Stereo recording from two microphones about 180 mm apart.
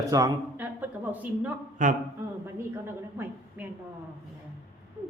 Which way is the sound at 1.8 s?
45° right (ahead or behind).